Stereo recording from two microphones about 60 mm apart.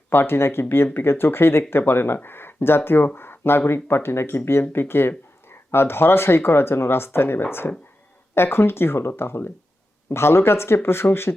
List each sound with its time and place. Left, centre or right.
0.1 s speech: left
3.2 s a sound: left
3.7 s speech: left